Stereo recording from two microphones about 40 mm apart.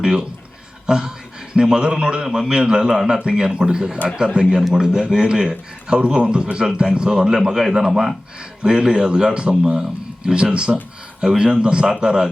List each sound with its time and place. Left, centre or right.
0.0 s a man's voice: centre